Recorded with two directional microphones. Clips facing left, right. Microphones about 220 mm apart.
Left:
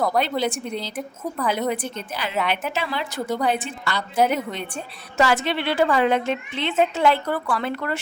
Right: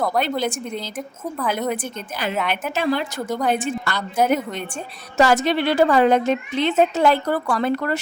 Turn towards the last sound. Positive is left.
turn(degrees=-40)  # may be behind; listen again after turning